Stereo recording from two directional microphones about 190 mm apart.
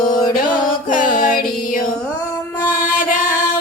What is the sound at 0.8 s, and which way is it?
Music, 45° left (ahead or behind).